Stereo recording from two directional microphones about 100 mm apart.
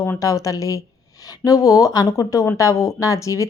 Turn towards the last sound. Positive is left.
turn(degrees=30)  # may be behind; listen again after turning